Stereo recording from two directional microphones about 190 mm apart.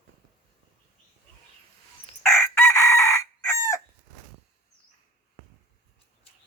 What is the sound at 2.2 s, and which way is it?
Chicken, 15° left (ahead or behind).